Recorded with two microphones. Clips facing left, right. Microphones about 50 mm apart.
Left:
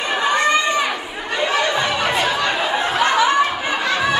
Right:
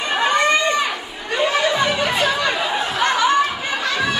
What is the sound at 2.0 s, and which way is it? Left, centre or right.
Chatter, centre.